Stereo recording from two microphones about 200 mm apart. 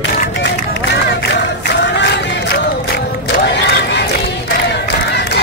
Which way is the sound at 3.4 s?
60° left (ahead or behind).